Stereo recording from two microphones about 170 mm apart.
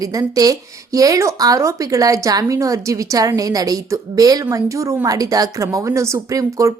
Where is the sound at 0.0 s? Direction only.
20° right (ahead or behind).